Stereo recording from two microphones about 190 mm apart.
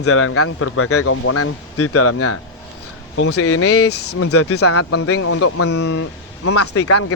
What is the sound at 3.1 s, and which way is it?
Speech, 90° left.